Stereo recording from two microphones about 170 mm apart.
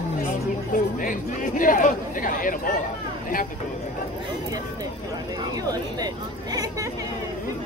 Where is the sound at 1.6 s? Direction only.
55° left (ahead or behind).